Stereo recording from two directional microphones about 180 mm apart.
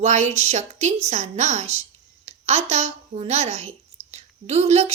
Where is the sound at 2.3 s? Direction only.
35° right (ahead or behind).